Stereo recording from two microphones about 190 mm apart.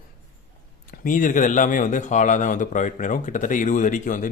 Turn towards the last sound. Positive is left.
turn(degrees=45)  # may be behind; listen again after turning